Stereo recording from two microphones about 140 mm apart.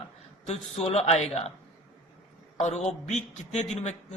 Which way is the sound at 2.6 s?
55° left (ahead or behind).